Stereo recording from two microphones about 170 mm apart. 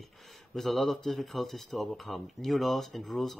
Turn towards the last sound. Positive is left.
turn(degrees=0)  # may be behind; listen again after turning